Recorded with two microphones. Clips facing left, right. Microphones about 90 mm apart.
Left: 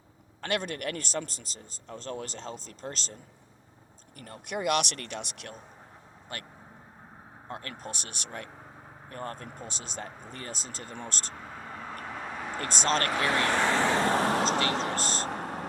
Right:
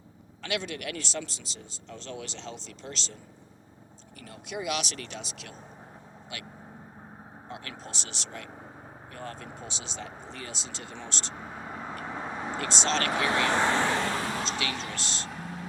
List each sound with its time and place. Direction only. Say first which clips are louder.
0.4 s speech: left 2 dB; 45° left (ahead or behind)
4.2 s speech: left 3 dB; 50° left (ahead or behind)
11.3 s vehicle: right 2 dB; 20° right (ahead or behind)
12.5 s speech: left 1 dB; 45° left (ahead or behind)
13.3 s speech: right 1 dB; 15° right (ahead or behind)
14.2 s speech: left 6 dB; 50° left (ahead or behind)
15.3 s vehicle: left 5 dB; 60° left (ahead or behind)